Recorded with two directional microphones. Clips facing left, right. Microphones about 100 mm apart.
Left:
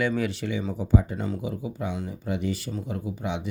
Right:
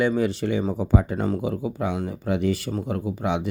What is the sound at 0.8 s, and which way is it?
Speech, 75° right (ahead or behind).